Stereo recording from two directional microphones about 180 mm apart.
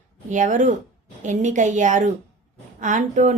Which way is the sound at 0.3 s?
45° right (ahead or behind).